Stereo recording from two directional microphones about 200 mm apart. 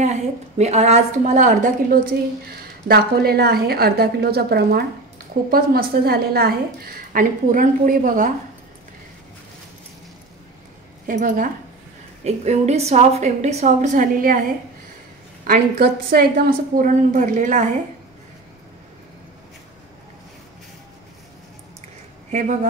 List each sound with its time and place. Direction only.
0.0 s a woman's voice: 35° right (ahead or behind)
2.5 s a woman's voice: 50° right (ahead or behind)
11.1 s a woman's voice: 40° right (ahead or behind)
15.4 s a woman's voice: 50° right (ahead or behind)
22.3 s a woman's voice: 35° right (ahead or behind)